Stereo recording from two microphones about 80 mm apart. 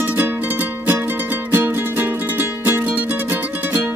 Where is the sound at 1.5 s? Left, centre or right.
Right.